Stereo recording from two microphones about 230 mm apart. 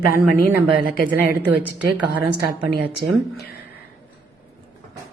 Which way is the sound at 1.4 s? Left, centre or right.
Centre.